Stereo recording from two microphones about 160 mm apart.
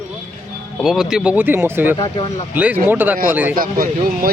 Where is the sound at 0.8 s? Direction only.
5° right (ahead or behind).